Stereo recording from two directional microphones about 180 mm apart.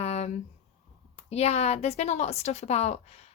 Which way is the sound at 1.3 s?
35° left (ahead or behind).